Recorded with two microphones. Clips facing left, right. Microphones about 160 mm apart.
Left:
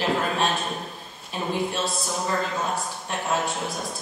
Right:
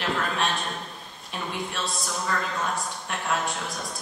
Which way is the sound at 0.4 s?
Centre (ahead or behind).